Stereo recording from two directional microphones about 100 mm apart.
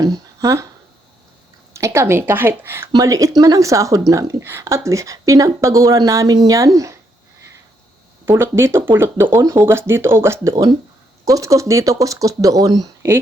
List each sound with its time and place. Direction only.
0.0 s a sound: 35° right (ahead or behind)
1.7 s speech: 30° right (ahead or behind)
2.9 s a woman's voice: 35° right (ahead or behind)
8.2 s speech: 25° right (ahead or behind)
10.5 s speech: 50° right (ahead or behind)
11.3 s a woman's voice: 35° right (ahead or behind)